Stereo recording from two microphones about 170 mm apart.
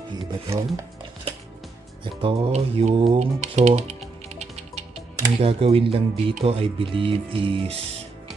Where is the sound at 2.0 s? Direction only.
30° right (ahead or behind).